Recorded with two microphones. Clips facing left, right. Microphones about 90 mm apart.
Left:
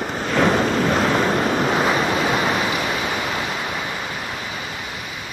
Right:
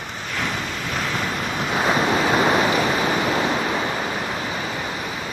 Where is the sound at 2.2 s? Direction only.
35° right (ahead or behind).